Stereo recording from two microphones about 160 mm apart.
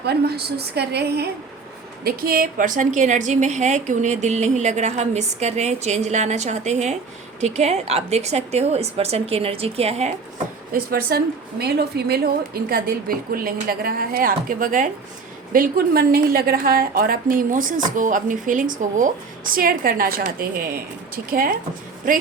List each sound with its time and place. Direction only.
0.0 s a woman's voice: 90° right
2.0 s a woman's voice: 60° right (ahead or behind); by 10.2 s 45° right (ahead or behind)
10.7 s a woman's voice: 65° right (ahead or behind)
11.6 s a woman's voice: 90° right; by 22.2 s 55° right (ahead or behind)